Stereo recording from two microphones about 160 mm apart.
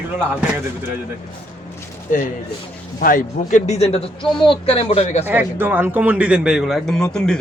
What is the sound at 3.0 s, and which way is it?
A man's voice, 60° left (ahead or behind).